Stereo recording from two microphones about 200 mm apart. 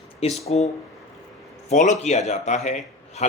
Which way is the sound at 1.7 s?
35° left (ahead or behind).